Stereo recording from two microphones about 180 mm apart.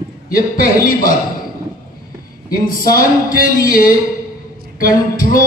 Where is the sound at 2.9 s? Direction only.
50° left (ahead or behind).